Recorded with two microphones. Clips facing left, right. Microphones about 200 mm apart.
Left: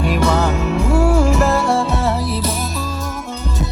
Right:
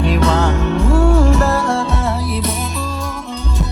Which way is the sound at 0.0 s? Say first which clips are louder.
Right 1 dB; 5° left (ahead or behind).